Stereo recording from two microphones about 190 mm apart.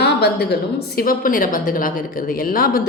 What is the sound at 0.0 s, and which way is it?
A woman's voice, 60° left (ahead or behind).